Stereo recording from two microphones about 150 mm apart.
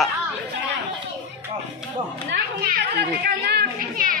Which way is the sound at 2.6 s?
85° right.